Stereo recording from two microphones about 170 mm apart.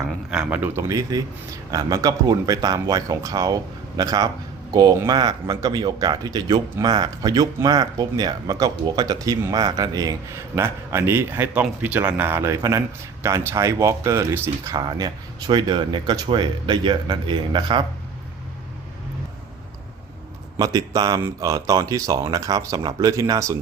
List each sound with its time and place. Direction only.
0.3 s speech: 5° right (ahead or behind); by 17.8 s 30° right (ahead or behind)
20.6 s speech: 20° right (ahead or behind)